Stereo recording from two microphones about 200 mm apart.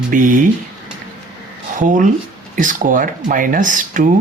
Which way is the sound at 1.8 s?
40° right (ahead or behind).